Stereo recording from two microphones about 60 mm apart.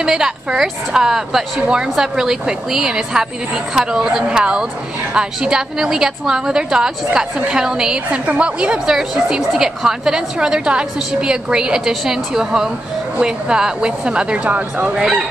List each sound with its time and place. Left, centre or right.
0.0 s a woman's voice: centre
15.0 s a woman's voice: centre